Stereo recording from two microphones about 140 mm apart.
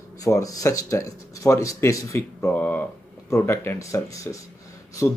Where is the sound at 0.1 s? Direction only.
25° left (ahead or behind).